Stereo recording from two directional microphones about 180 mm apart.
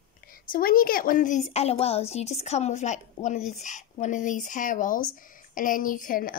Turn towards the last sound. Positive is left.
turn(degrees=50)  # may be behind; listen again after turning